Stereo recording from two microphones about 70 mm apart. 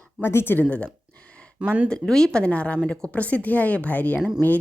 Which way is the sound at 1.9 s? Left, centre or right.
Centre.